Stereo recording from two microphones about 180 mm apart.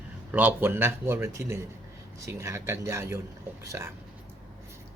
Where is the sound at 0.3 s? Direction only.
10° right (ahead or behind).